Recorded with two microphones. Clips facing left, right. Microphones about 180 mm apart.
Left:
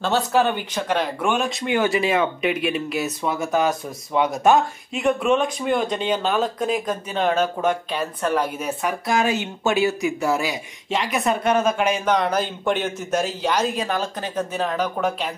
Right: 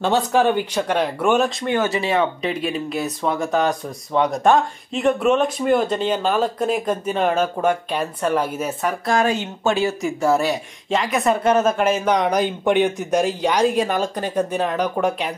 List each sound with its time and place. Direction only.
0.0 s speech: 15° right (ahead or behind)
1.7 s speech: 15° left (ahead or behind)
2.0 s speech: 30° right (ahead or behind)
2.9 s speech: 5° left (ahead or behind)
10.4 s speech: centre (ahead or behind)